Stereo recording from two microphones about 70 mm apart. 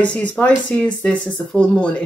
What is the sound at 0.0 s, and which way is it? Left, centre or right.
Speech, centre.